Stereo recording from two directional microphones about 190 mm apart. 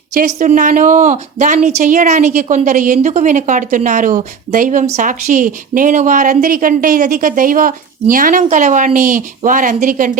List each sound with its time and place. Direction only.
0.1 s a woman's voice: 45° right (ahead or behind)